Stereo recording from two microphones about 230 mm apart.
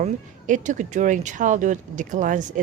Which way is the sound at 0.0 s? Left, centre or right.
Right.